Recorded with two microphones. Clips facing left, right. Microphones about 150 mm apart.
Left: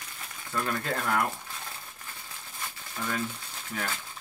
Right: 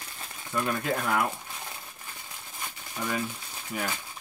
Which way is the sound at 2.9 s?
10° right (ahead or behind).